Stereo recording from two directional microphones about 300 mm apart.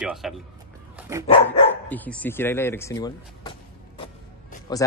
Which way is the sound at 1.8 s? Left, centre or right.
Centre.